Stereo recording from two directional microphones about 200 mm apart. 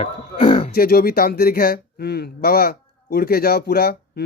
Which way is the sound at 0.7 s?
50° left (ahead or behind).